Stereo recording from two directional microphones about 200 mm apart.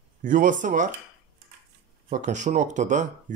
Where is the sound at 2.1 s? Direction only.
35° right (ahead or behind).